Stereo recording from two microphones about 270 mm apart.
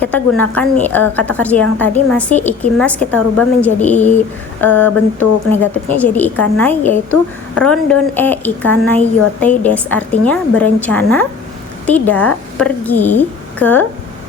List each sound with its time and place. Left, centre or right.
0.0 s a woman's voice: centre
3.9 s speech: left
4.6 s a woman's voice: centre